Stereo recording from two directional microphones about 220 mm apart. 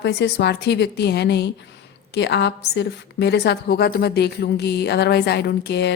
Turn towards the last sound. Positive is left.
turn(degrees=50)  # may be behind; listen again after turning